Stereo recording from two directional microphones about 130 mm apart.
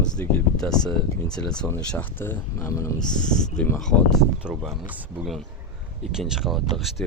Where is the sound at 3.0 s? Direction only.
75° left (ahead or behind).